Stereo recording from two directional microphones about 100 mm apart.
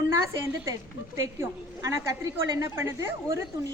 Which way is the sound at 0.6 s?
30° right (ahead or behind).